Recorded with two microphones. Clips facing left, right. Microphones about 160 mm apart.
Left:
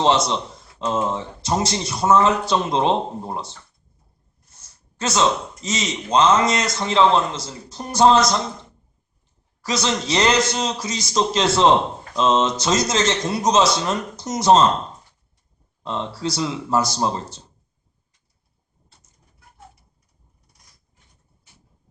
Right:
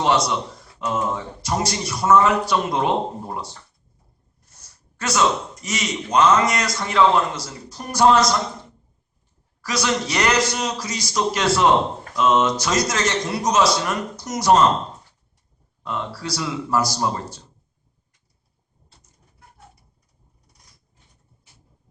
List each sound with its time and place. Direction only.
0.9 s speech: 25° left (ahead or behind)
4.6 s a sound: 25° left (ahead or behind)
5.6 s speech: 20° left (ahead or behind)
9.6 s speech: 25° left (ahead or behind)
15.8 s speech: 25° left (ahead or behind)